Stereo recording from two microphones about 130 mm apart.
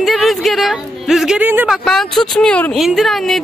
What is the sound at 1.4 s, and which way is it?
Speech, 15° right (ahead or behind).